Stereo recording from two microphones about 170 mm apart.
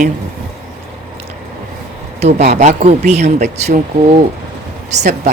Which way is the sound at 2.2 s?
45° right (ahead or behind).